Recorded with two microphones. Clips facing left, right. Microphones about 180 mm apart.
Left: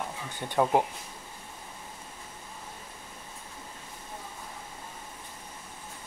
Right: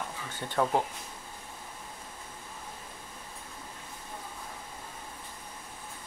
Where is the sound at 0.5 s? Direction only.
15° left (ahead or behind).